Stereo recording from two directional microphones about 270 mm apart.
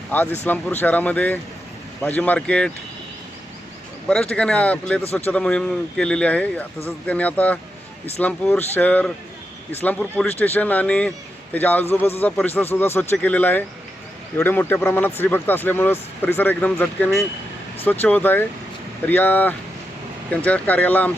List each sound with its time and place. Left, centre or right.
0.1 s speech: centre
4.1 s speech: centre